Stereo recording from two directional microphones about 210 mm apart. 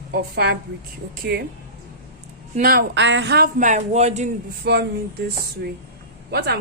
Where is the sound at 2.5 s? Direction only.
45° right (ahead or behind).